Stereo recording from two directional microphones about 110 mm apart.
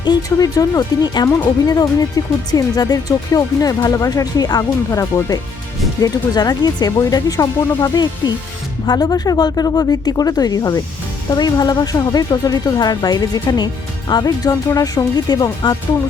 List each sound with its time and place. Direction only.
0.0 s speech: 35° left (ahead or behind)